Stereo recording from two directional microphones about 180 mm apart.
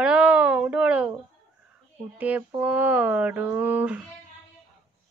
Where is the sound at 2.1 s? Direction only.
10° right (ahead or behind).